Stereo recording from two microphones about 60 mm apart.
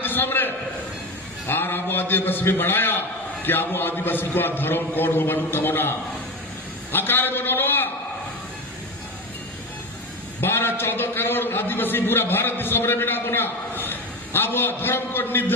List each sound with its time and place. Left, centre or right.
0.0 s a sound: left
1.5 s a man's voice: left
6.9 s a man's voice: left
10.4 s a man's voice: left